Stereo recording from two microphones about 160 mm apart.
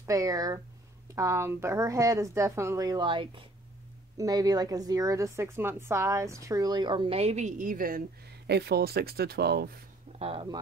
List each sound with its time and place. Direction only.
0.0 s a woman's voice: 20° right (ahead or behind); by 9.7 s 90° right
10.1 s speech: 35° right (ahead or behind)